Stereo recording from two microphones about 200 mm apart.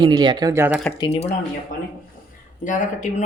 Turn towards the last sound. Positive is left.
turn(degrees=40)  # may be behind; listen again after turning